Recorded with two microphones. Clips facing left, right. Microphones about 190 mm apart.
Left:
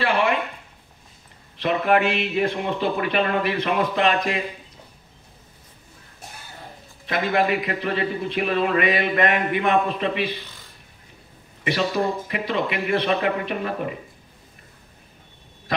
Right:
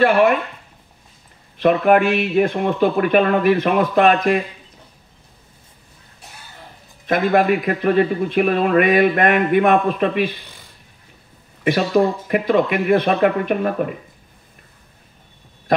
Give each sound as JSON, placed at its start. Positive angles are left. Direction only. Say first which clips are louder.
{"t": 0.0, "sound": "a man's voice", "louder": "right 7 dB", "side_deg": -50}
{"t": 1.6, "sound": "a man's voice", "louder": "right 6 dB", "side_deg": -50}
{"t": 7.1, "sound": "a man's voice", "louder": "right 6 dB", "side_deg": -50}
{"t": 12.3, "sound": "a man's voice", "louder": "right 8 dB", "side_deg": -50}